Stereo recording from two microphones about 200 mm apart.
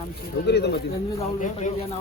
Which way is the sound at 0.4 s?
55° left (ahead or behind).